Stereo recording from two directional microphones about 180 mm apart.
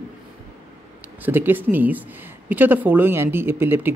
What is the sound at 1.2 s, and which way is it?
Speech, 10° right (ahead or behind).